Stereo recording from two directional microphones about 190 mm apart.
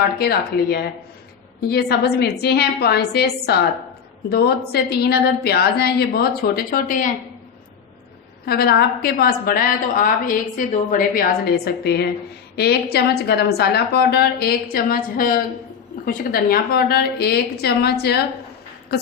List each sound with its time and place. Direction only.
0.2 s a woman's voice: 55° left (ahead or behind)
8.4 s a woman's voice: 55° left (ahead or behind)